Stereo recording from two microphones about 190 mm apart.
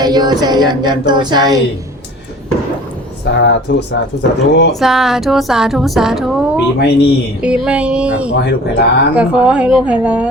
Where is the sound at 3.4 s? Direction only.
65° left (ahead or behind).